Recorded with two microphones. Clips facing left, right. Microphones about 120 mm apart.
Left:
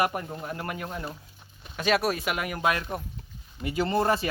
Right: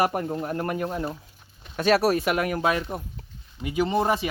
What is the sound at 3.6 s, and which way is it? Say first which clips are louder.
Speech: right 2 dB; 15° right (ahead or behind).